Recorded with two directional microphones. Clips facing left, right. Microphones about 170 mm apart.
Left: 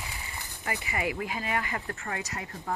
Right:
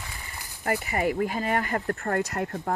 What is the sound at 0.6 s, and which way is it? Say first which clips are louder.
Speech: right 6 dB; 50° right (ahead or behind).